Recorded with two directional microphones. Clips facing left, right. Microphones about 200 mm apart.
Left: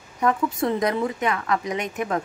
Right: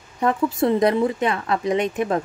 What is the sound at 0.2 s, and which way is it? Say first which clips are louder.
A woman's voice: right 2 dB; 25° right (ahead or behind).